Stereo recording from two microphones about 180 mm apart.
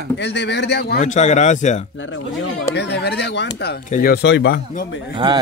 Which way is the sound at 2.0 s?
90° left.